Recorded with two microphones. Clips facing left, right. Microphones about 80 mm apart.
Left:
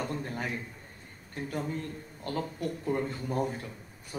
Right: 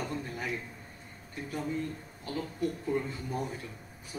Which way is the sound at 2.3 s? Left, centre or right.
Left.